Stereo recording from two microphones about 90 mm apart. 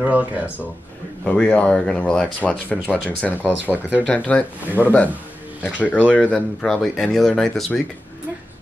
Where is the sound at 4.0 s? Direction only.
15° left (ahead or behind).